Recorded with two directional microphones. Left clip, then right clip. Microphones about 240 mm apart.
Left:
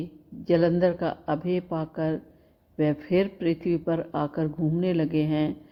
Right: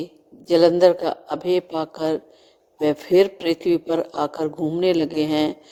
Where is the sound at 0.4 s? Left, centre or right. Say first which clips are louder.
Right 8 dB; right.